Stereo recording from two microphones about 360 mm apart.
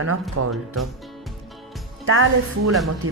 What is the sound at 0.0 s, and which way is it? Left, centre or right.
Speech, right.